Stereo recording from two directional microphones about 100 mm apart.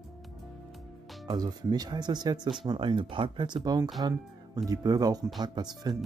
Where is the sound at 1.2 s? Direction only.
40° right (ahead or behind).